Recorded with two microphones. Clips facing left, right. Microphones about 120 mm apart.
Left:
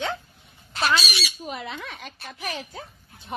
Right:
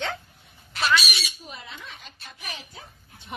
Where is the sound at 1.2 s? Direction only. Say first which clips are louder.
Left 7 dB; 80° left; by 2.8 s 55° left (ahead or behind).